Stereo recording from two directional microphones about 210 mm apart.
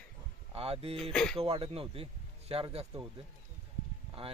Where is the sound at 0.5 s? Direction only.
30° right (ahead or behind).